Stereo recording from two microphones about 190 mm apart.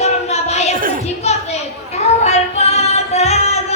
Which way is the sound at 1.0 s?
35° left (ahead or behind).